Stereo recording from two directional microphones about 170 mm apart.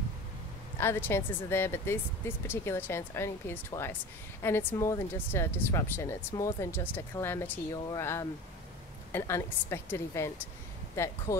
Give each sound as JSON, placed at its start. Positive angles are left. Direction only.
{"t": 0.7, "sound": "speech", "side_deg": 15}